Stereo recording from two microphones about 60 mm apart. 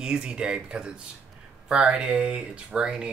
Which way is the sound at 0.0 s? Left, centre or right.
Centre.